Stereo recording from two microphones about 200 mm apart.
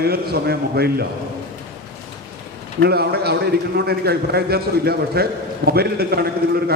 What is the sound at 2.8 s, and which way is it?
A man's voice, 55° right (ahead or behind).